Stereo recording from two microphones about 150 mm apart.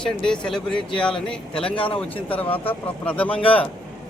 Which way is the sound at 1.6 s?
35° left (ahead or behind).